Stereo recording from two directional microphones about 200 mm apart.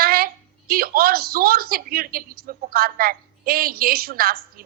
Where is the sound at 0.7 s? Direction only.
50° right (ahead or behind).